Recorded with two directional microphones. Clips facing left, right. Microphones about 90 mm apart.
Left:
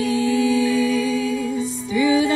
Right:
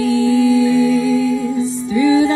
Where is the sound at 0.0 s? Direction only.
35° right (ahead or behind).